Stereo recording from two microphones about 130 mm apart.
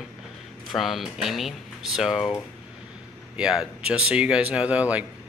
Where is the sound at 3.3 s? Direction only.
5° right (ahead or behind).